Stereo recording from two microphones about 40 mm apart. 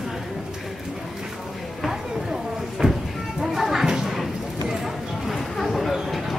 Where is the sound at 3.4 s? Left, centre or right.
Centre.